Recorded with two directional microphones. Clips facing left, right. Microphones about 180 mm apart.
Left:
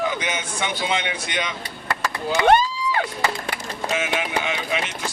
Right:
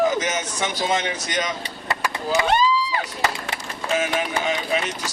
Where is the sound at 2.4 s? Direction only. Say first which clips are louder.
Left 5 dB; 55° left (ahead or behind).